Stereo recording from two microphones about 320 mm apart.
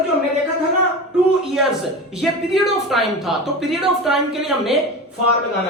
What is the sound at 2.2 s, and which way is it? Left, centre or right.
Speech, centre.